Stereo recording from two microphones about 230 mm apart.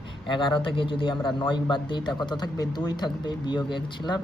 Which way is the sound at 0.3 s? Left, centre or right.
Left.